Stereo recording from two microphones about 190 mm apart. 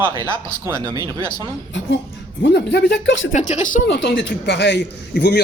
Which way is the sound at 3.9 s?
65° left (ahead or behind).